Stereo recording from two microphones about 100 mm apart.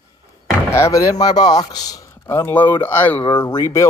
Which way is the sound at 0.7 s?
30° left (ahead or behind).